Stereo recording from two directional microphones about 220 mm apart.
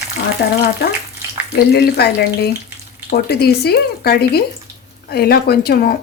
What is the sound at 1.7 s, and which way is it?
A woman's voice, 45° left (ahead or behind).